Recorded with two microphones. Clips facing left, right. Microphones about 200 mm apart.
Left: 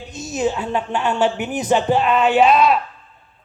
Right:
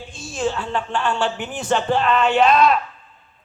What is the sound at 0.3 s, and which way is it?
A man's voice, 20° left (ahead or behind).